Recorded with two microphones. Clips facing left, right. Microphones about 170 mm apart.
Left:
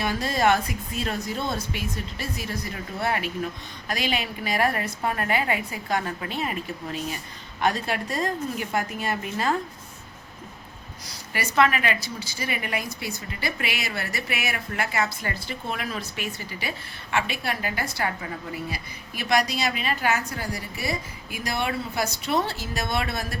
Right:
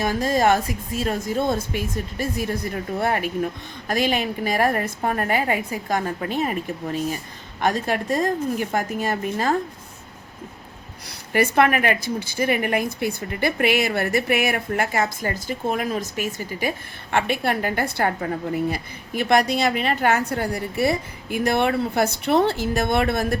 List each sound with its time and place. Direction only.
0.0 s a woman's voice: 45° right (ahead or behind)
11.3 s a woman's voice: 55° right (ahead or behind)